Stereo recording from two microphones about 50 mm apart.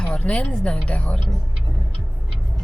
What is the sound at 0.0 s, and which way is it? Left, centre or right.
Speech, left.